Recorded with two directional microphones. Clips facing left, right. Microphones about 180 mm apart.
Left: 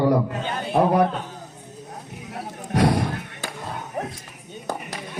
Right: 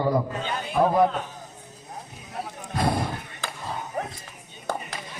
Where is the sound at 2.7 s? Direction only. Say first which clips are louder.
Left 6 dB; 75° left (ahead or behind).